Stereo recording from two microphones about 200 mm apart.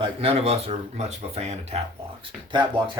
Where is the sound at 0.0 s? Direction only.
30° right (ahead or behind).